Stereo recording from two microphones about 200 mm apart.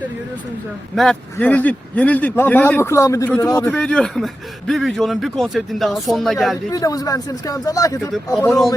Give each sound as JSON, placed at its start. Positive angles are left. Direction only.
{"t": 0.9, "sound": "a man's voice", "side_deg": 5}
{"t": 3.7, "sound": "a man's voice", "side_deg": 5}
{"t": 6.7, "sound": "a man's voice", "side_deg": 15}
{"t": 8.1, "sound": "a man's voice", "side_deg": 0}